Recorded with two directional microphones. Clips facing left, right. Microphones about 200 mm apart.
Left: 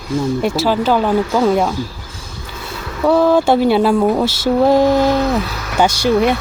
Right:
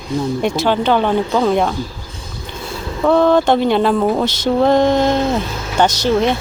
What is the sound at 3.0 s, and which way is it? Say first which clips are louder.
Speech: even; 5° left (ahead or behind).